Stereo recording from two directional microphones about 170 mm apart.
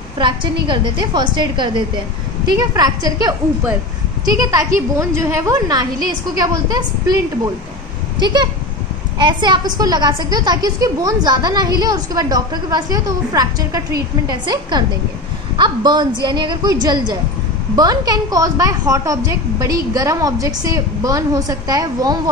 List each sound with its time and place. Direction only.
0.7 s a child's voice: 30° right (ahead or behind)
8.2 s a child's voice: 25° right (ahead or behind)